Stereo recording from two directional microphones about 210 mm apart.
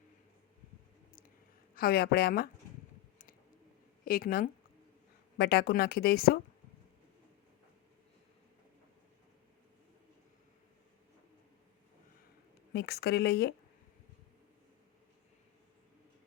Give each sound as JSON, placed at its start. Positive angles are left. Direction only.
{"t": 1.7, "sound": "speech", "side_deg": 45}
{"t": 4.0, "sound": "speech", "side_deg": 45}
{"t": 12.7, "sound": "speech", "side_deg": 50}